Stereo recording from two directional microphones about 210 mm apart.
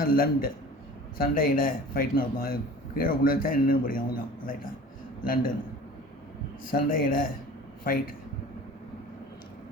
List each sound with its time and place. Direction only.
0.0 s a man's voice: 45° left (ahead or behind)
6.7 s speech: 40° left (ahead or behind)